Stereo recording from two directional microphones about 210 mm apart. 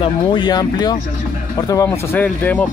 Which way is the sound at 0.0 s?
20° left (ahead or behind).